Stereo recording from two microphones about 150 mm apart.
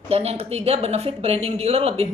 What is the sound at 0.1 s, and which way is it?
A woman's voice, 40° right (ahead or behind).